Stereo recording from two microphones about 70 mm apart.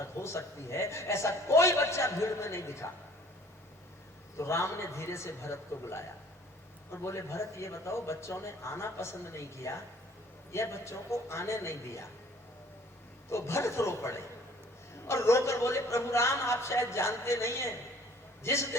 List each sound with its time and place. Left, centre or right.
0.0 s a man's voice: left
4.4 s a man's voice: left
13.3 s a man's voice: left